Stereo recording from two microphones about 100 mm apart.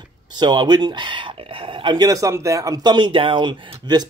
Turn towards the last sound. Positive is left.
turn(degrees=-50)  # may be behind; listen again after turning